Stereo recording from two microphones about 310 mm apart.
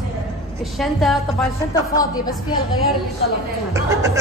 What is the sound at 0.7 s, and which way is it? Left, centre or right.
Speech, centre.